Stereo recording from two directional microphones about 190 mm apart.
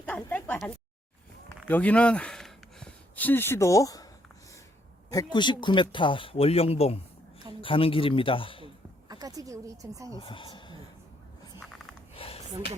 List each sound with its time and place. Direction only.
0.0 s a sound: 5° left (ahead or behind)
1.6 s speech: 10° left (ahead or behind)
5.1 s speech: 25° left (ahead or behind)
9.0 s speech: 20° right (ahead or behind)
10.2 s speech: 30° left (ahead or behind)
12.1 s a sound: 30° left (ahead or behind)